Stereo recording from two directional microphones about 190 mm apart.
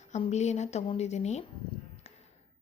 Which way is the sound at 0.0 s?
35° left (ahead or behind).